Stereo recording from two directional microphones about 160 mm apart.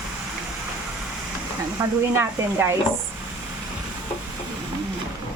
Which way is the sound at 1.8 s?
20° right (ahead or behind).